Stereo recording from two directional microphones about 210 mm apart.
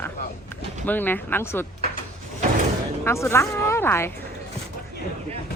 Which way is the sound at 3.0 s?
10° left (ahead or behind).